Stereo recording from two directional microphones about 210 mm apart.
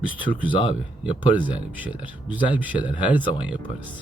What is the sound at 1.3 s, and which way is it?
Speech, 5° right (ahead or behind).